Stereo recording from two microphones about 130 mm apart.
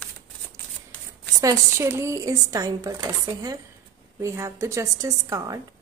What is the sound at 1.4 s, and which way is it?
Speech, 25° right (ahead or behind).